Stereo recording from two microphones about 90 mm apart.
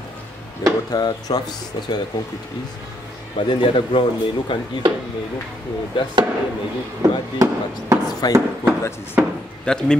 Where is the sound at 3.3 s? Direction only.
70° left (ahead or behind).